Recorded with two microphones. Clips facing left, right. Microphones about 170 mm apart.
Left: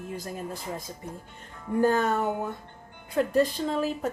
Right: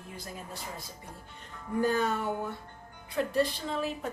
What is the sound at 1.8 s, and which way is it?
A woman's voice, 50° left (ahead or behind).